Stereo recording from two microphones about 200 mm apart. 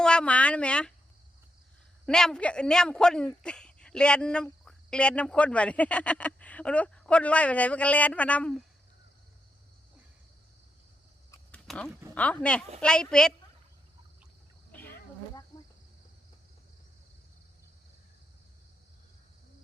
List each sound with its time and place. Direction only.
0.0 s speech: 5° left (ahead or behind)
2.0 s speech: 5° left (ahead or behind)
11.3 s a sound: 5° left (ahead or behind)
12.1 s speech: 5° left (ahead or behind)
14.7 s insect: 10° left (ahead or behind)
15.5 s cricket: 20° left (ahead or behind)